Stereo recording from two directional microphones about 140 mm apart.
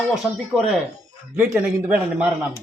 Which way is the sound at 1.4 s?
15° right (ahead or behind).